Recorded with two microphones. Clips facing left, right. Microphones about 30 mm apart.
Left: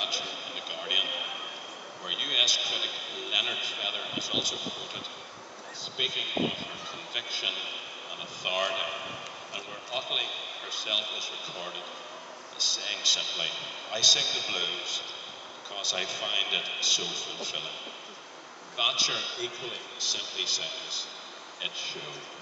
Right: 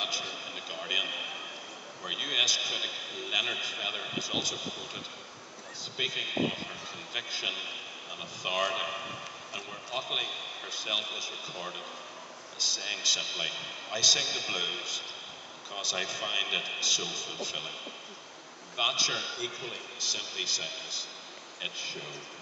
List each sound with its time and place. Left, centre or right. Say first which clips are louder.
0.0 s a sound: left 2 dB; centre
5.9 s a man's voice: left 2 dB; centre
18.8 s speech: left 1 dB; centre